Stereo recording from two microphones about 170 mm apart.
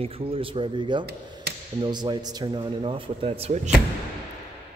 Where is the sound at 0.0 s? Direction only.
30° right (ahead or behind).